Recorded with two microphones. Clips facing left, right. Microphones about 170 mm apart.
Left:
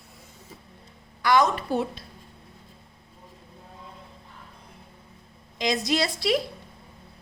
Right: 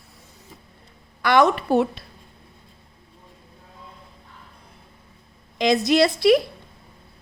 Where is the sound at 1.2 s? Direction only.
60° right (ahead or behind).